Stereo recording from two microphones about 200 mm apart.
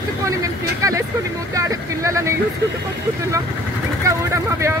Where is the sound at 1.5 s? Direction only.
15° right (ahead or behind).